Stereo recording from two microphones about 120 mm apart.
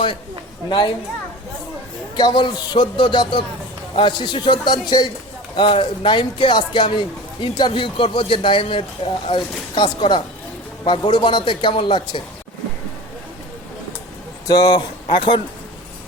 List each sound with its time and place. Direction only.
0.7 s a man's voice: 40° left (ahead or behind)
2.1 s a man's voice: 40° left (ahead or behind)
14.4 s speech: 30° left (ahead or behind)
15.0 s speech: 45° left (ahead or behind)